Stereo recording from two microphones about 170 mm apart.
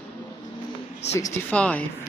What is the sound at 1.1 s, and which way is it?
Speech, 15° left (ahead or behind).